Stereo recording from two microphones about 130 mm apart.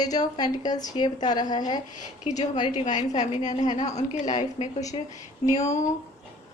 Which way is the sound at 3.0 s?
65° left (ahead or behind).